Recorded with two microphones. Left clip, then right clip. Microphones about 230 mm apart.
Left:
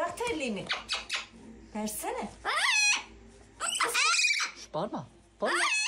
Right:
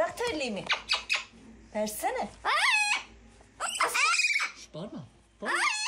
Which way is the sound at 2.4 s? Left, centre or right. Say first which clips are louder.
Right 1 dB; centre.